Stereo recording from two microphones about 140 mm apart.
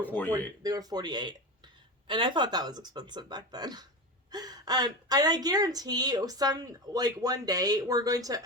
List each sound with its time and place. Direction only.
0.0 s speech: 10° left (ahead or behind)
0.6 s a woman's voice: 25° right (ahead or behind)